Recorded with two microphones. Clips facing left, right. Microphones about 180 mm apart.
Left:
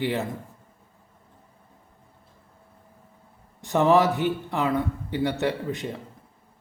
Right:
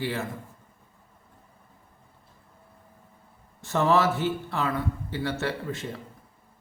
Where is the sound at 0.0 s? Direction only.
20° left (ahead or behind).